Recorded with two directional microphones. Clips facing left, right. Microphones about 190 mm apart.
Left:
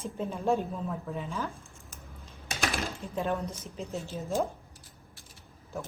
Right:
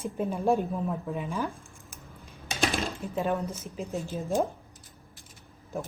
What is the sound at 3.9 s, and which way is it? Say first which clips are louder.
Speech: right 4 dB; 15° right (ahead or behind).